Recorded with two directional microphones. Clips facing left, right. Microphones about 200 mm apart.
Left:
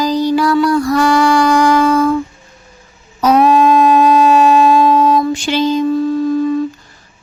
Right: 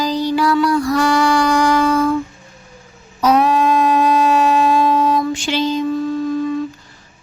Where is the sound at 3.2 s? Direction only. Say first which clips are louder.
Left 4 dB; 45° left (ahead or behind).